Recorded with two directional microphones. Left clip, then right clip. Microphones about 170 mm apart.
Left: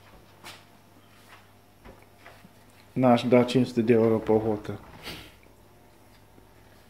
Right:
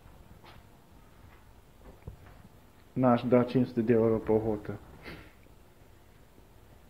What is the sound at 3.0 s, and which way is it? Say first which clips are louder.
Speech: left 5 dB; 20° left (ahead or behind).